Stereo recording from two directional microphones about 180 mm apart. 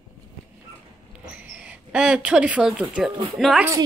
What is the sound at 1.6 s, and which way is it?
Speech, 5° right (ahead or behind).